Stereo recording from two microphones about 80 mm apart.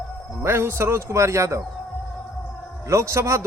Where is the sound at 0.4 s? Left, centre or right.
Right.